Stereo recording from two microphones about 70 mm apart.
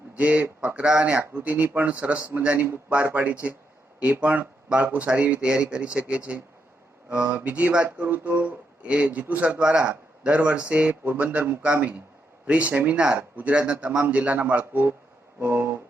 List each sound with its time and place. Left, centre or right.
0.1 s a man's voice: centre